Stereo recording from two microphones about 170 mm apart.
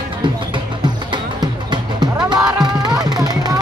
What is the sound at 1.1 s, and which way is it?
Music, 25° right (ahead or behind).